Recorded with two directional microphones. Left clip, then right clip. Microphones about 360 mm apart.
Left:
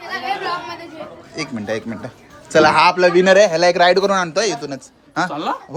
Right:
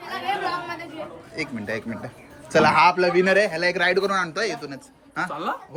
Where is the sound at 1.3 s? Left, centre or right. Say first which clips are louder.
Left 5 dB; centre.